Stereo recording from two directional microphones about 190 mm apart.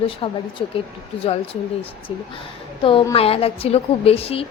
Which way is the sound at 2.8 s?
25° left (ahead or behind).